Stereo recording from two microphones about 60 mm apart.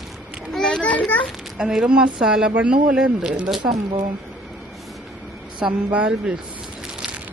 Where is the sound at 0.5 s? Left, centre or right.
Centre.